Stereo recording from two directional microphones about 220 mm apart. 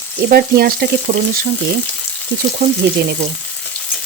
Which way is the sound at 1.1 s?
35° right (ahead or behind).